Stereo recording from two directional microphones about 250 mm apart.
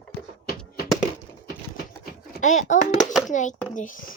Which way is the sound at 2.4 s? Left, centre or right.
Left.